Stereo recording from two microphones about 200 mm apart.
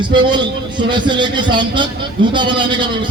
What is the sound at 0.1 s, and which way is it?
A man's voice, 25° right (ahead or behind).